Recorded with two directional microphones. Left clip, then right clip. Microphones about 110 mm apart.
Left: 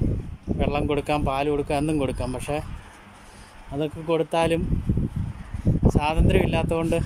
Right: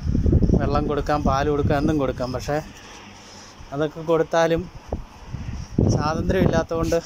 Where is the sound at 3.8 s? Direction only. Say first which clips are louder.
Right 3 dB; 20° left (ahead or behind).